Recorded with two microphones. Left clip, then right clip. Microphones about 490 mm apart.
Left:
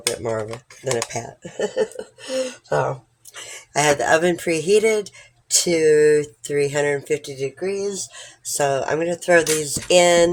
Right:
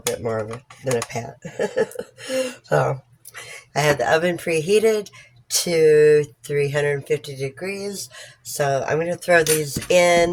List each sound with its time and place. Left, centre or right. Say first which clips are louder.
0.0 s speech: even; right
3.3 s speech: left 2 dB; right